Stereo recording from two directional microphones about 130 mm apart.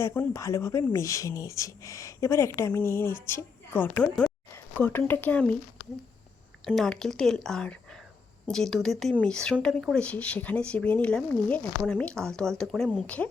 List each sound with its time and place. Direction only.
0.0 s speech: 20° left (ahead or behind)
6.7 s speech: 5° left (ahead or behind)